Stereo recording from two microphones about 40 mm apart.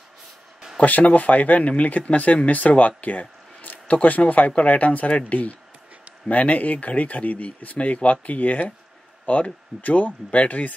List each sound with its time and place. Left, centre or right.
0.7 s speech: left